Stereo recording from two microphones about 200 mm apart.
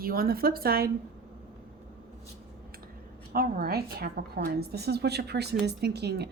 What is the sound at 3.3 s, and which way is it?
A woman's voice, 45° right (ahead or behind).